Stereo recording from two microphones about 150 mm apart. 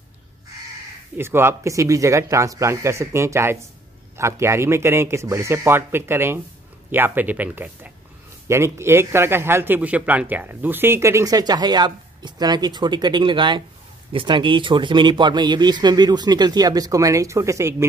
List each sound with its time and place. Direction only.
1.1 s a man's voice: 15° right (ahead or behind)